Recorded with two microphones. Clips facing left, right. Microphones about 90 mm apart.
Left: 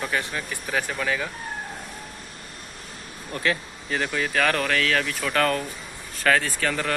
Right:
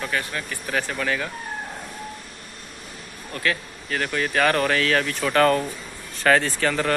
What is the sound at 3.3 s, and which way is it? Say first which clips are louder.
Speech: even; 15° left (ahead or behind).